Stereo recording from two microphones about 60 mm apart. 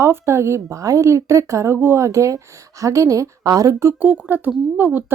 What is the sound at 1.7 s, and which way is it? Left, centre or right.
A woman's voice, right.